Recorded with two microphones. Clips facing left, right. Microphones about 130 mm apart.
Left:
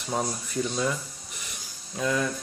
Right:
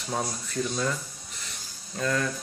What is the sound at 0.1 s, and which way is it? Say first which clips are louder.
Speech: left 2 dB; 10° left (ahead or behind).